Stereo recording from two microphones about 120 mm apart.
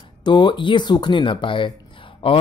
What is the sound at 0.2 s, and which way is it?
Speech, 40° left (ahead or behind).